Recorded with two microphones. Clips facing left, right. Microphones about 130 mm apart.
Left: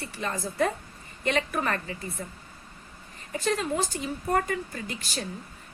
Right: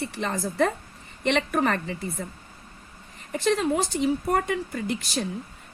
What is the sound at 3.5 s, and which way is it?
A woman's voice, 75° right (ahead or behind).